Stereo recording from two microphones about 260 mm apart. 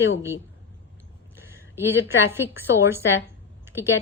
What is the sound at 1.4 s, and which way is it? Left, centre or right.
A woman's voice, centre.